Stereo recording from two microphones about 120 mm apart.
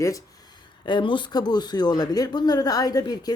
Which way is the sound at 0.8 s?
40° left (ahead or behind).